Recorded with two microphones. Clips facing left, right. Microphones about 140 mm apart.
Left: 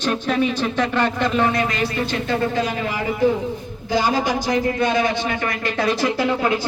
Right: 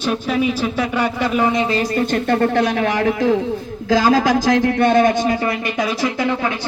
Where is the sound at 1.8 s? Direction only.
40° right (ahead or behind); by 5.9 s 15° right (ahead or behind).